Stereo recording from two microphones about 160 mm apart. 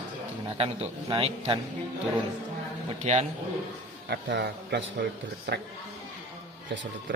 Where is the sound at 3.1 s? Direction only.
45° right (ahead or behind).